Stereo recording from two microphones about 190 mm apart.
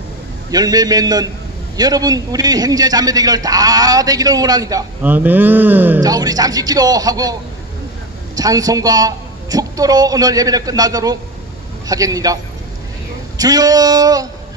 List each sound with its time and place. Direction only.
0.5 s a man's voice: 20° right (ahead or behind)
8.4 s a man's voice: 20° right (ahead or behind)
13.4 s a man's voice: 20° right (ahead or behind)